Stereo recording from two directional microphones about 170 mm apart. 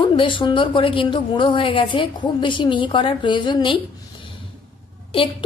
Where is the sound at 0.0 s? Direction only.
30° left (ahead or behind).